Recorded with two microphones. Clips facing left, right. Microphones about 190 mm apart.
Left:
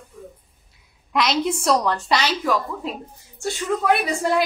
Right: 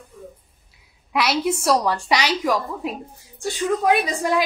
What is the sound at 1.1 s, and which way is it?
A woman's voice, 10° right (ahead or behind).